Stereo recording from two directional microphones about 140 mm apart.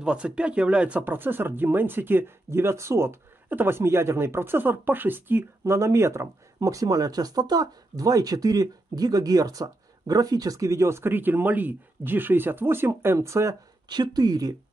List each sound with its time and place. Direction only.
0.0 s speech: 5° right (ahead or behind); by 14.5 s 30° right (ahead or behind)